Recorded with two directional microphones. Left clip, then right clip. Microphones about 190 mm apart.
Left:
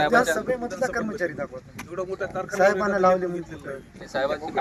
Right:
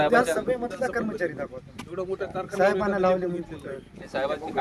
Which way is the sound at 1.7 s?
20° left (ahead or behind).